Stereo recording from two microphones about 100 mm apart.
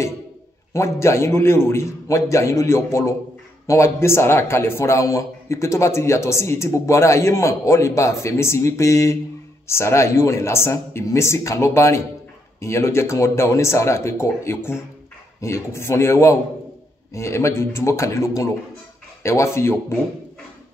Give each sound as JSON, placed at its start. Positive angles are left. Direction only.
{"t": 0.7, "sound": "a man's voice", "side_deg": 30}